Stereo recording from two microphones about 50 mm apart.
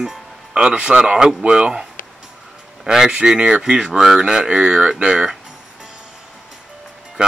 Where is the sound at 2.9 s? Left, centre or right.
Centre.